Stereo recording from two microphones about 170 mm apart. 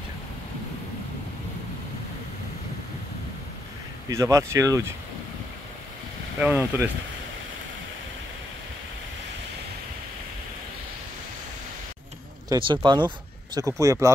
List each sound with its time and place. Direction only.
4.1 s speech: 15° right (ahead or behind)
6.4 s speech: 10° right (ahead or behind)
12.4 s speech: 30° right (ahead or behind)